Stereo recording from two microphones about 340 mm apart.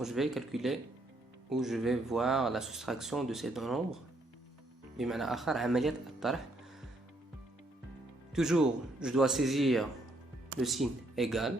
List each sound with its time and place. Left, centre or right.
0.0 s speech: centre
4.9 s speech: centre
8.4 s speech: centre